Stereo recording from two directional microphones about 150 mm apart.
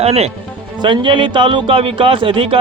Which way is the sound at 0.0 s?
45° right (ahead or behind).